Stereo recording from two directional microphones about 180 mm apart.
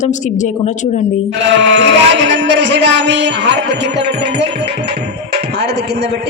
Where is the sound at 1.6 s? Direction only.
85° right.